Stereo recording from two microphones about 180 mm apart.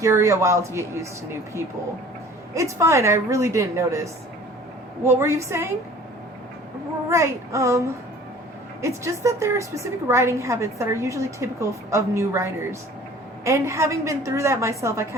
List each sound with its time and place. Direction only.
0.0 s a woman's voice: 15° right (ahead or behind)
7.1 s a woman's voice: 15° right (ahead or behind)
8.8 s a woman's voice: 15° right (ahead or behind)